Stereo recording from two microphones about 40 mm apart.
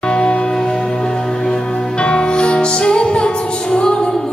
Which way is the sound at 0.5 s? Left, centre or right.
Centre.